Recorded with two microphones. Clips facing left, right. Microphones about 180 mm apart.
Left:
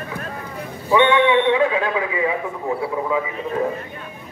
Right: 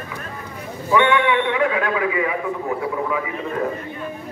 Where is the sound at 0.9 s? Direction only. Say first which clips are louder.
Left 2 dB; 20° left (ahead or behind).